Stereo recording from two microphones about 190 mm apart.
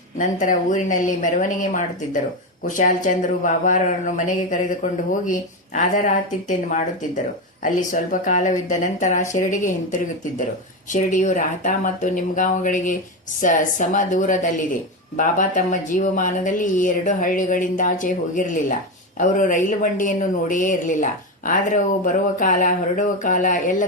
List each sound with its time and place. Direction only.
0.2 s speech: 40° left (ahead or behind)
10.9 s a woman's voice: 40° left (ahead or behind)